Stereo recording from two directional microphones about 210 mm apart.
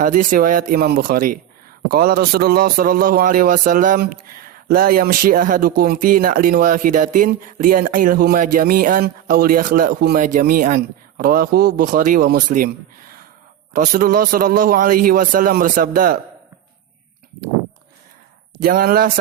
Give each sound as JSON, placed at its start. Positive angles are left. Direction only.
{"t": 0.0, "sound": "a man's voice", "side_deg": -40}
{"t": 13.7, "sound": "a man's voice", "side_deg": -40}
{"t": 18.6, "sound": "a man's voice", "side_deg": -45}